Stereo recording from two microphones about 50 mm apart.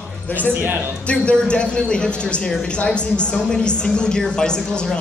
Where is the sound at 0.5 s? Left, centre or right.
Right.